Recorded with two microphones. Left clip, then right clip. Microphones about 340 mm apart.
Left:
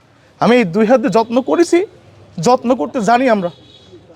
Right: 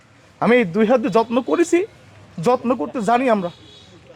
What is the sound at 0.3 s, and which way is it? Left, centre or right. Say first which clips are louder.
Speech: left 4 dB; left.